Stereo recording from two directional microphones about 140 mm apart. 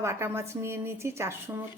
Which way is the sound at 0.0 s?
20° right (ahead or behind).